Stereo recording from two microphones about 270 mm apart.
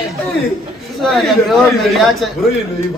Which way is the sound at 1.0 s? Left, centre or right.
Centre.